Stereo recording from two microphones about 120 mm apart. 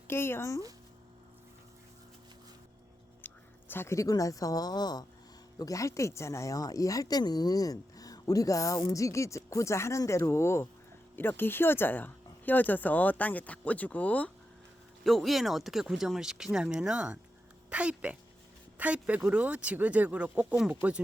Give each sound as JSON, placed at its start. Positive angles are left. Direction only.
{"t": 0.1, "sound": "speech", "side_deg": 20}
{"t": 3.2, "sound": "speech", "side_deg": 15}
{"t": 15.0, "sound": "speech", "side_deg": 0}